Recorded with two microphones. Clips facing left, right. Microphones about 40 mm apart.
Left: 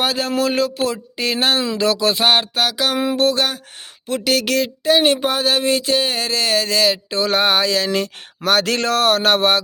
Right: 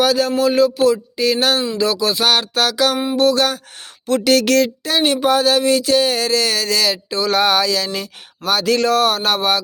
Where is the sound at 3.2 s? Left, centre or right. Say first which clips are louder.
Right 4 dB; left.